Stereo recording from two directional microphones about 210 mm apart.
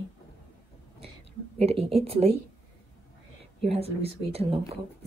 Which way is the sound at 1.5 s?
30° right (ahead or behind).